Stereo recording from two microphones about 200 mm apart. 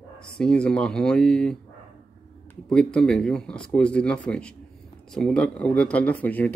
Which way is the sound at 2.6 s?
5° left (ahead or behind).